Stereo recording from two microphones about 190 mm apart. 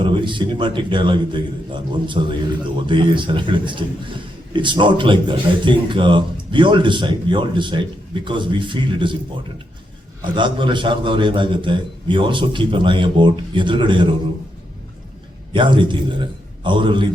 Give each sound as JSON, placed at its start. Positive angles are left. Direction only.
{"t": 0.0, "sound": "a man's voice", "side_deg": -25}
{"t": 10.2, "sound": "a man's voice", "side_deg": -25}
{"t": 15.5, "sound": "a man's voice", "side_deg": -25}